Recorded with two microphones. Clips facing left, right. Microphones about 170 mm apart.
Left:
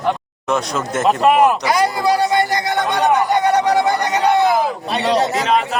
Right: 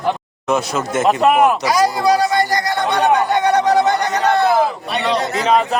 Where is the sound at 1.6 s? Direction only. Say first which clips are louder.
Right 1 dB; 25° left (ahead or behind).